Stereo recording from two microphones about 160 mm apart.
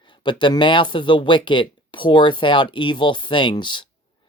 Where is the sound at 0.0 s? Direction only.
30° left (ahead or behind).